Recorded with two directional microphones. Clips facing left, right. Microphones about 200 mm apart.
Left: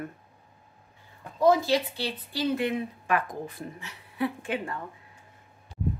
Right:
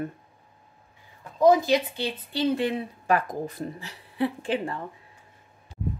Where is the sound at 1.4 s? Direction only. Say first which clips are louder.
Right 3 dB; 20° right (ahead or behind).